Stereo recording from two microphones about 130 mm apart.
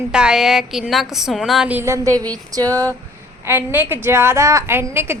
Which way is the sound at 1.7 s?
20° right (ahead or behind).